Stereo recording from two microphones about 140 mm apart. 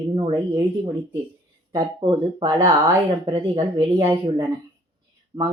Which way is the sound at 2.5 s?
15° right (ahead or behind).